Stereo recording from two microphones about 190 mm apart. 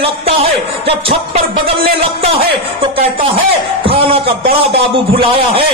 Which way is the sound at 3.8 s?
30° right (ahead or behind).